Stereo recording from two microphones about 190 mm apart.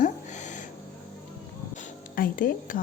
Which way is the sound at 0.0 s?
40° left (ahead or behind).